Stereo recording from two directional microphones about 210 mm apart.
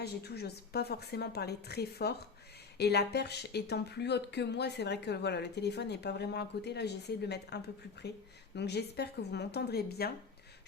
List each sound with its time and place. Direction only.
0.0 s speech: 50° left (ahead or behind)